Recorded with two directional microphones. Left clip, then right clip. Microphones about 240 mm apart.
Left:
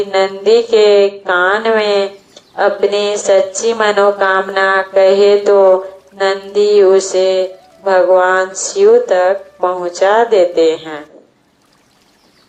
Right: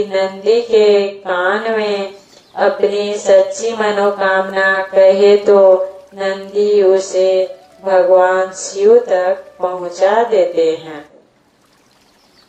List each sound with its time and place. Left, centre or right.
0.1 s speech: left